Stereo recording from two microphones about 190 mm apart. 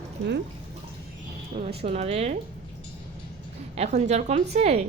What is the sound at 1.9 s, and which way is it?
Speech, 35° right (ahead or behind).